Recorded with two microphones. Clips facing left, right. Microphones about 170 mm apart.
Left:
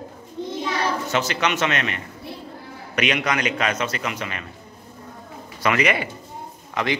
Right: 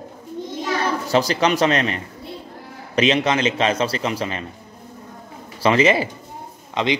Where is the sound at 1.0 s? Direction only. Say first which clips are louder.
Right 5 dB; 35° right (ahead or behind).